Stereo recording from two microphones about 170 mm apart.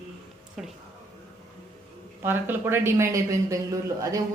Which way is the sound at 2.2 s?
15° right (ahead or behind).